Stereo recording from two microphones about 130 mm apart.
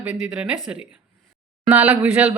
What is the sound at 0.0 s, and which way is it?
Speech, 5° right (ahead or behind).